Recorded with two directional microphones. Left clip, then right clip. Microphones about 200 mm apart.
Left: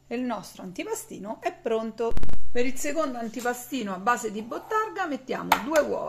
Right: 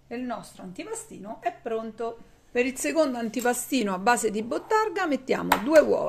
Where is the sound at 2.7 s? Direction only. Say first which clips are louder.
Right 2 dB; 25° right (ahead or behind).